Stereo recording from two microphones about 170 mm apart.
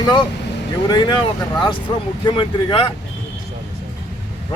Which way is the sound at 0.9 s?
25° left (ahead or behind).